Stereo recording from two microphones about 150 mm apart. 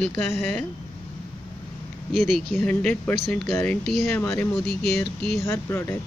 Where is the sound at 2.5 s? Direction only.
5° left (ahead or behind).